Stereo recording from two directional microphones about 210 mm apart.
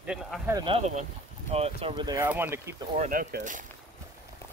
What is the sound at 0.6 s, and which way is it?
Speech, 25° right (ahead or behind).